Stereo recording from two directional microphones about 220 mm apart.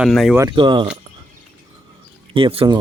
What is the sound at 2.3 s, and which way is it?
Speech, 25° right (ahead or behind).